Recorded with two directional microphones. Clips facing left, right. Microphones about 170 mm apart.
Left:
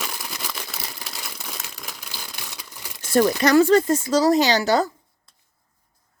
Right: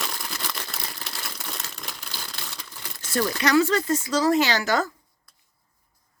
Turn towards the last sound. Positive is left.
turn(degrees=30)  # may be behind; listen again after turning